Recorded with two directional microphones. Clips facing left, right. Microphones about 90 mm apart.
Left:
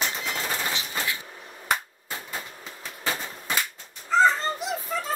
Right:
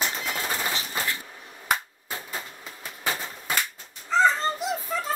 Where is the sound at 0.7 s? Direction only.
40° right (ahead or behind).